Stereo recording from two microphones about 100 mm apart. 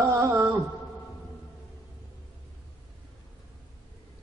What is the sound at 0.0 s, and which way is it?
Music, 30° right (ahead or behind).